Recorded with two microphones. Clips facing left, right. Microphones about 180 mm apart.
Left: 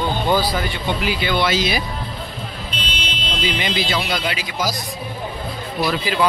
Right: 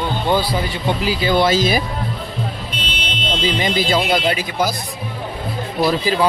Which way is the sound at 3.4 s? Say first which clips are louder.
Right 3 dB; 45° right (ahead or behind).